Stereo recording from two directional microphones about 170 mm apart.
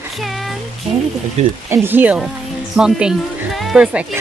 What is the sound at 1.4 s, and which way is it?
Speech, 40° right (ahead or behind).